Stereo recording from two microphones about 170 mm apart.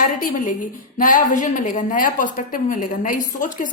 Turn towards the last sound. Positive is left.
turn(degrees=50)  # may be behind; listen again after turning